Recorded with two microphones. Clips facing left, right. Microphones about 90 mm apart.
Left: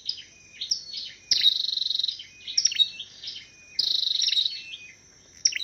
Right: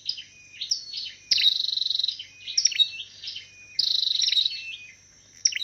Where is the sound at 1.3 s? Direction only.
45° left (ahead or behind).